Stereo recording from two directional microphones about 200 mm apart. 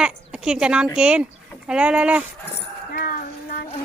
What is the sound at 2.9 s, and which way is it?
Speech, 45° left (ahead or behind).